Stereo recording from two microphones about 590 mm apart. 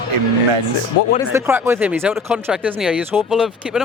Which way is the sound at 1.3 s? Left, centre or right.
Centre.